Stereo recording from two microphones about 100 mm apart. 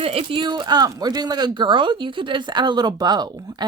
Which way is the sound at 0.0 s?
70° right (ahead or behind).